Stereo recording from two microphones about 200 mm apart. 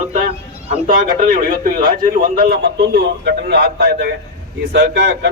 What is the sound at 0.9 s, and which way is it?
A man's voice, 45° right (ahead or behind).